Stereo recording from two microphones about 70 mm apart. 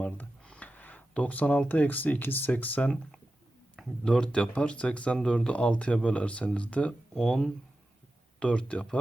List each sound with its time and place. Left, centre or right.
0.0 s speech: centre
4.0 s speech: centre
7.2 s speech: centre